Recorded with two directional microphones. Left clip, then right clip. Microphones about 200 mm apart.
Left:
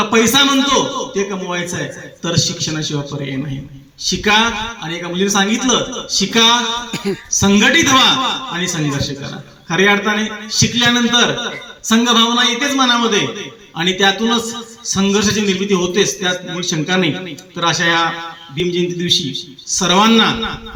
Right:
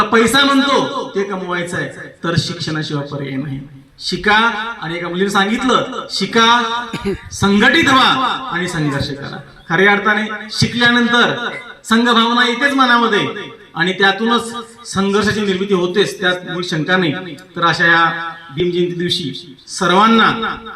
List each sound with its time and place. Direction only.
0.0 s a man's voice: 25° left (ahead or behind)
4.2 s a man's voice: 20° left (ahead or behind)
6.9 s a sound: centre (ahead or behind)
7.3 s a man's voice: 25° left (ahead or behind)